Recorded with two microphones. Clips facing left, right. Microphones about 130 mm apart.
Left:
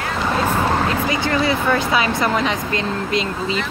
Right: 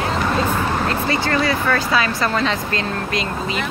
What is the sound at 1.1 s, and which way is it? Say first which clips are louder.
Speech: even; 20° left (ahead or behind).